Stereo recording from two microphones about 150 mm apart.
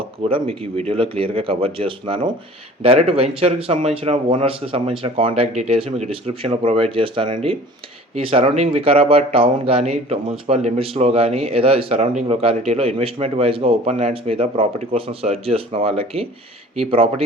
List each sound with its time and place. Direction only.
0.2 s a man's voice: 40° right (ahead or behind)